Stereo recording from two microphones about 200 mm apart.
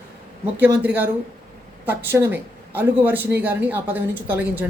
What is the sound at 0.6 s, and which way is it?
Speech, 10° right (ahead or behind).